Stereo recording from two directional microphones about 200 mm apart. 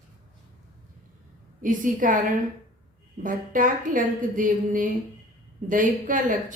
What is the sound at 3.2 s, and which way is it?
A woman's voice, 40° right (ahead or behind).